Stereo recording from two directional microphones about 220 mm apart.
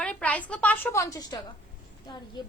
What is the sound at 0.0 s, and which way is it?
A woman's voice, 5° left (ahead or behind).